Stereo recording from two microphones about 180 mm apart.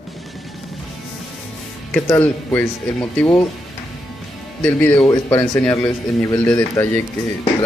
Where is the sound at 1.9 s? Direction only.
15° left (ahead or behind).